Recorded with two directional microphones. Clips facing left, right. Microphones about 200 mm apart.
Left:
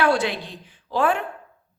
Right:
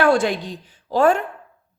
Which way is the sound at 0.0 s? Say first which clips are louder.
Right 4 dB; 45° right (ahead or behind).